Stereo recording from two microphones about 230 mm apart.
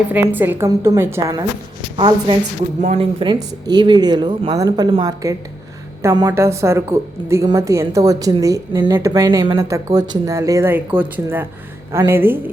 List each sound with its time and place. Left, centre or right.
0.1 s a woman's voice: centre